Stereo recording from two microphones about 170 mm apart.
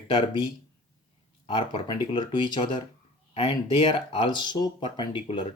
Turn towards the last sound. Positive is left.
turn(degrees=30)  # may be behind; listen again after turning